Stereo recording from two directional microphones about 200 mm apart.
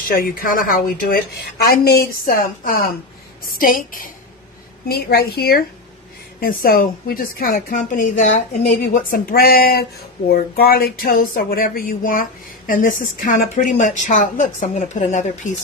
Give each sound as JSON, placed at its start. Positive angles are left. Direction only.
{"t": 0.1, "sound": "speech", "side_deg": 45}